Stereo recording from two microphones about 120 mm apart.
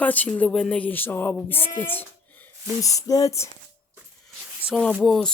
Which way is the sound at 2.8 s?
30° left (ahead or behind).